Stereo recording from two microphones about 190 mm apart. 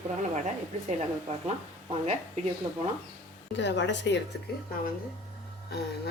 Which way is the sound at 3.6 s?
70° left (ahead or behind).